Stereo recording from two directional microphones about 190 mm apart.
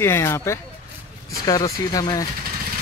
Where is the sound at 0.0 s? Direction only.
15° left (ahead or behind).